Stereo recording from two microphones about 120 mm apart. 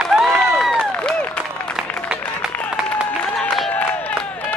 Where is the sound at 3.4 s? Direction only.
10° left (ahead or behind).